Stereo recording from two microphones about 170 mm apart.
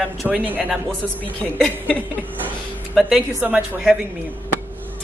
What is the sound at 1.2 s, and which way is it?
A woman's voice, 10° left (ahead or behind).